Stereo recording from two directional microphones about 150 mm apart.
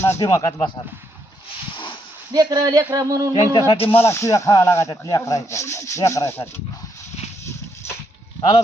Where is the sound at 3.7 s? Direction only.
40° left (ahead or behind).